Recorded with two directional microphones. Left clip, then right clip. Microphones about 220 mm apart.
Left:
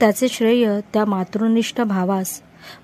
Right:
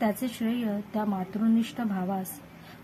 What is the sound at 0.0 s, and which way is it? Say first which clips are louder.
A woman's voice: left 13 dB; 45° left (ahead or behind).